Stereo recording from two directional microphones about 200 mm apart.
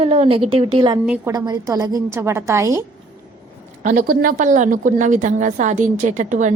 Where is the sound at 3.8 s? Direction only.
45° right (ahead or behind).